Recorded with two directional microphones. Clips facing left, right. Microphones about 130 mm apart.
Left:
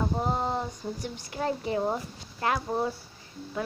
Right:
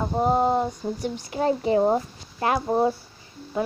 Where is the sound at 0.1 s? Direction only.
20° right (ahead or behind).